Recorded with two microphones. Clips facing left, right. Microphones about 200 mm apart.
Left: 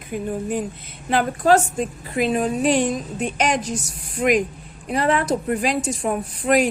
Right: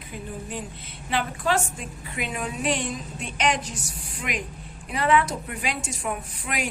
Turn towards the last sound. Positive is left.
turn(degrees=40)  # may be behind; listen again after turning